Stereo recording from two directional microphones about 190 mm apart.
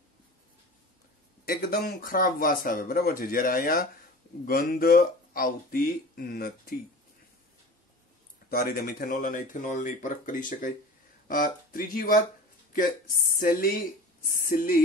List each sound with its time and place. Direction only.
1.4 s speech: 50° left (ahead or behind)
8.5 s speech: 50° left (ahead or behind)
13.3 s speech: 45° left (ahead or behind)